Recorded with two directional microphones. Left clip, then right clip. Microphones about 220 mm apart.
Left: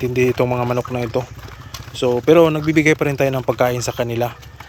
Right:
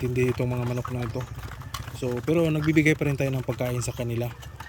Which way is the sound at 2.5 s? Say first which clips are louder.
Left 7 dB; 5° right (ahead or behind).